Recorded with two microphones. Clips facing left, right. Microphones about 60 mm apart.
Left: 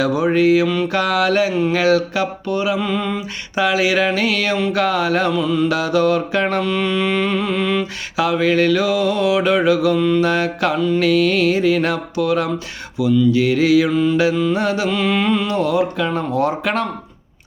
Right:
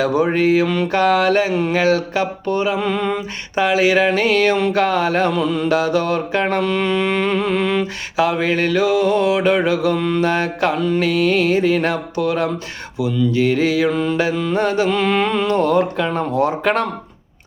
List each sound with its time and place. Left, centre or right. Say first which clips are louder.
0.0 s mantra: left 1 dB; right
16.1 s mantra: right 1 dB; right